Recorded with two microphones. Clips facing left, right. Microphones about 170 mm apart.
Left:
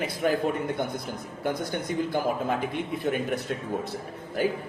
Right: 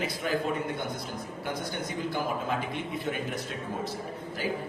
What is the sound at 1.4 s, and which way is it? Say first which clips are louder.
A man's voice: left 6 dB; 50° left (ahead or behind).